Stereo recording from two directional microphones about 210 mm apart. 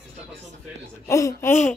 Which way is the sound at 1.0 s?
15° left (ahead or behind).